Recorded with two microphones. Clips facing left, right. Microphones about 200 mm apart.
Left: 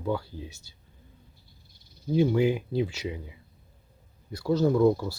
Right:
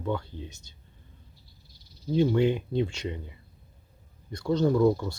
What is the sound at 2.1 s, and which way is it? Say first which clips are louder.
Speech: even; 10° left (ahead or behind).